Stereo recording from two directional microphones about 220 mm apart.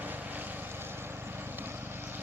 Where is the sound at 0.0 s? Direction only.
10° right (ahead or behind).